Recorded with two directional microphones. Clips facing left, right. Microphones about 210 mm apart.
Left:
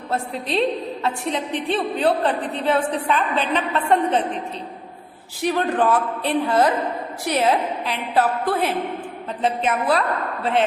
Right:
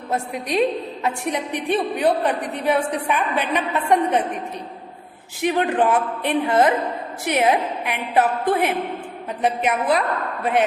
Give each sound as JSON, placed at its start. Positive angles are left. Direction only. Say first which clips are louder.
{"t": 0.1, "sound": "a woman's voice", "louder": "right 1 dB", "side_deg": -15}
{"t": 5.4, "sound": "a woman's voice", "louder": "right 1 dB", "side_deg": -15}